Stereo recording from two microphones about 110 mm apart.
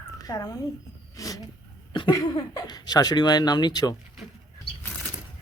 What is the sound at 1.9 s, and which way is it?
Cough, 45° left (ahead or behind).